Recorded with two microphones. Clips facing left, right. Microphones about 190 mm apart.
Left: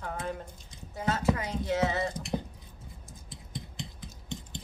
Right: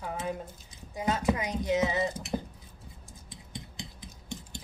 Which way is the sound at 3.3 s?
Centre (ahead or behind).